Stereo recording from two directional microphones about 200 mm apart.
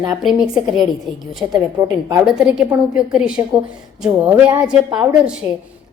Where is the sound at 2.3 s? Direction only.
5° right (ahead or behind).